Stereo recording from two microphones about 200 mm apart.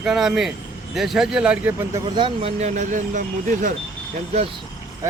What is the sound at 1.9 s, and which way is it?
Speech, 25° right (ahead or behind).